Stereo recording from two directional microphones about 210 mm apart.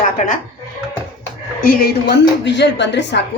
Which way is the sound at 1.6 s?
40° left (ahead or behind).